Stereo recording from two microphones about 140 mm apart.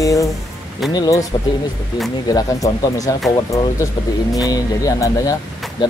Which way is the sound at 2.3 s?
25° left (ahead or behind).